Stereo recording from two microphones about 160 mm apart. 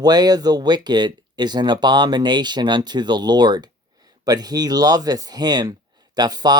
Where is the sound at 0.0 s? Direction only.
25° right (ahead or behind).